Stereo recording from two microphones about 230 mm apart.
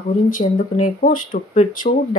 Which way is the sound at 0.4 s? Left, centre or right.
Left.